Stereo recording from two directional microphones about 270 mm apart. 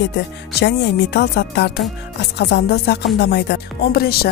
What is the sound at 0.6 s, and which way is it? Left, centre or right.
Speech, left.